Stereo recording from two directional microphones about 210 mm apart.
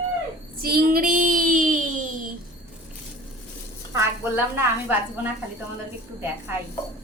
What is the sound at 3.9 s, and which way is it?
A woman's voice, 10° right (ahead or behind).